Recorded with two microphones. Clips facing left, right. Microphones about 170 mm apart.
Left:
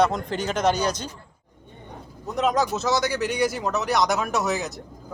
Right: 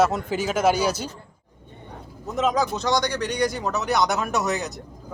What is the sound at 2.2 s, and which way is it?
Speech, centre (ahead or behind).